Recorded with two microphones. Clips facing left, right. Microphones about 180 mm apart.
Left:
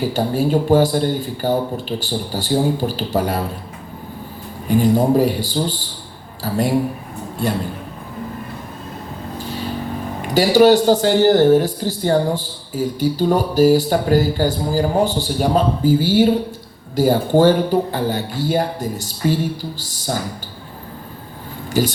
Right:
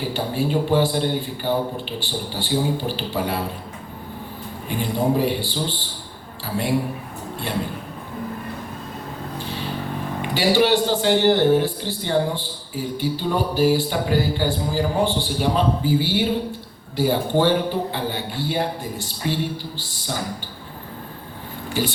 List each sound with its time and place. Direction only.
0.1 s speech: 40° left (ahead or behind)
4.7 s a man's voice: 40° left (ahead or behind)
7.4 s a man's voice: 40° left (ahead or behind)
10.3 s speech: 40° left (ahead or behind)
21.7 s speech: 40° left (ahead or behind)